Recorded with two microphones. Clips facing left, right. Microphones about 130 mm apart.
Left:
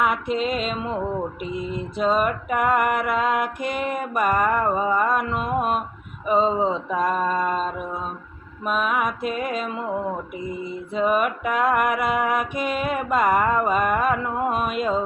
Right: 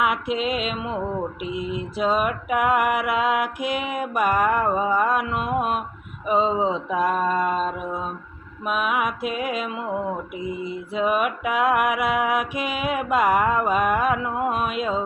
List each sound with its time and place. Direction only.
0.0 s mantra: 5° right (ahead or behind)